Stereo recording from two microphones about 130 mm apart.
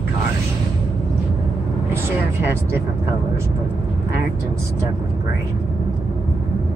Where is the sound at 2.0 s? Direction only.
15° right (ahead or behind).